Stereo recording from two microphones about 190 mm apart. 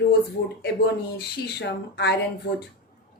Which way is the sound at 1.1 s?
60° left (ahead or behind).